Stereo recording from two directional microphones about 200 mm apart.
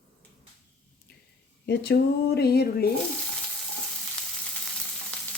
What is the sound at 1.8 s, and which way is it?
Speech, 55° left (ahead or behind).